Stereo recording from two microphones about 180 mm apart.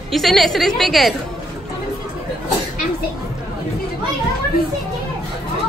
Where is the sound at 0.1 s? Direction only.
Centre (ahead or behind).